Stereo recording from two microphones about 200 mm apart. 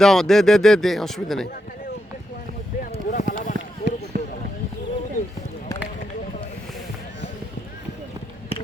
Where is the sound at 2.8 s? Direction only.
40° left (ahead or behind).